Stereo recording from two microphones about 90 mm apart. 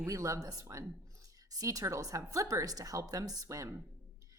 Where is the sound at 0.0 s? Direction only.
35° right (ahead or behind).